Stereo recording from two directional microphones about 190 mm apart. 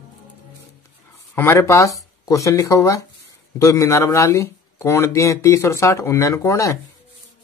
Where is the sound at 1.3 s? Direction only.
10° left (ahead or behind).